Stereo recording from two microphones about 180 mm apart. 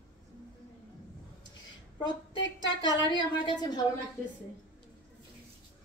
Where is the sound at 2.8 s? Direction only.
25° left (ahead or behind).